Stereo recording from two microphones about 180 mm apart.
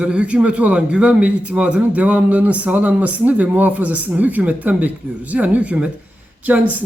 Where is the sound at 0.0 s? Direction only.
5° right (ahead or behind).